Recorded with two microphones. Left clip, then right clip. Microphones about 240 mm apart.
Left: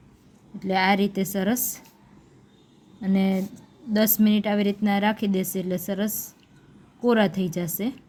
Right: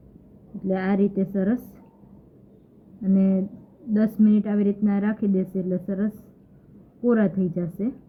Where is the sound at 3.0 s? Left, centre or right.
Left.